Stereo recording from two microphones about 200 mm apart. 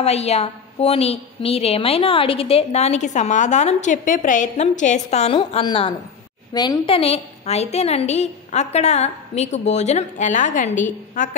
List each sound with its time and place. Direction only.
0.0 s a woman's voice: 30° left (ahead or behind)